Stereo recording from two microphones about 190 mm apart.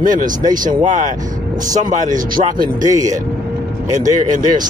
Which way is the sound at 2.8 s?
20° right (ahead or behind).